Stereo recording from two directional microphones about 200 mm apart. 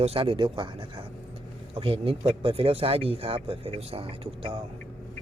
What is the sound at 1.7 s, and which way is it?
Speech, 30° right (ahead or behind).